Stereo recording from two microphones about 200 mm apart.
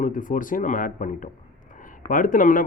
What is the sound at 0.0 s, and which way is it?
A man's voice, 40° left (ahead or behind).